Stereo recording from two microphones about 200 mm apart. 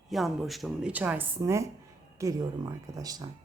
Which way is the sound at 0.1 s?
Centre (ahead or behind).